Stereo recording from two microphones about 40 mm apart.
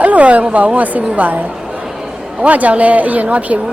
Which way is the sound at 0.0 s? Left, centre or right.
Right.